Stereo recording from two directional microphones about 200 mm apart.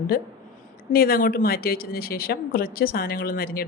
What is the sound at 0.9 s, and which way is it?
A woman's voice, 45° left (ahead or behind).